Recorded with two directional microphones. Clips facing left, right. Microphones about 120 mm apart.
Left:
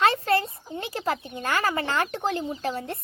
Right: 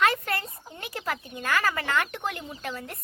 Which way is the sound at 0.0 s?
30° left (ahead or behind).